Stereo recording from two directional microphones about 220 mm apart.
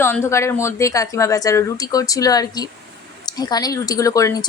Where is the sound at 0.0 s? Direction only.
10° left (ahead or behind).